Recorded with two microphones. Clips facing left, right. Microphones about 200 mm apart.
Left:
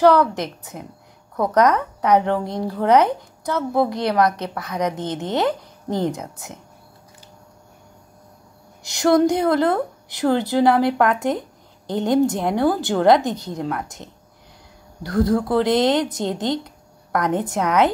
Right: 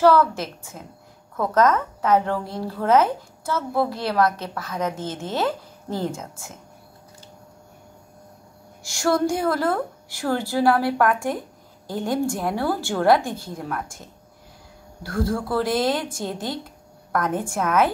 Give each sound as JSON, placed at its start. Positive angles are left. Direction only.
{"t": 0.0, "sound": "a woman's voice", "side_deg": 15}
{"t": 8.8, "sound": "speech", "side_deg": 20}